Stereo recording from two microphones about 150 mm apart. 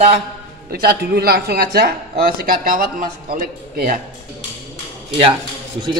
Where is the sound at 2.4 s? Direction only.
70° right (ahead or behind).